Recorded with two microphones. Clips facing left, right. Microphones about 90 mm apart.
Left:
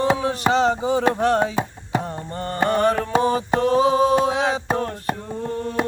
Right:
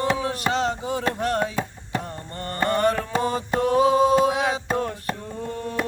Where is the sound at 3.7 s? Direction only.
20° left (ahead or behind).